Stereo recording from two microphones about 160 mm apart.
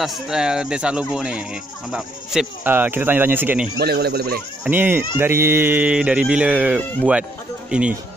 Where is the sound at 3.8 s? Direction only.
90° right.